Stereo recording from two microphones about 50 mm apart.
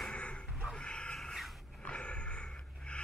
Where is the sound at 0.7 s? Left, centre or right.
Centre.